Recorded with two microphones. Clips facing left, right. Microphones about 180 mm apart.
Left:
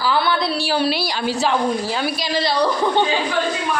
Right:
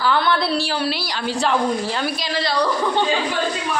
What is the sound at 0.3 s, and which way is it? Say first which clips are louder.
Speech: left 1 dB; centre (ahead or behind).